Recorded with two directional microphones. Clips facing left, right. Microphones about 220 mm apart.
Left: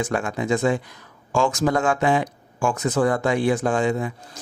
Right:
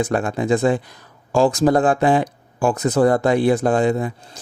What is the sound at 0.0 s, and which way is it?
Speech, 35° right (ahead or behind).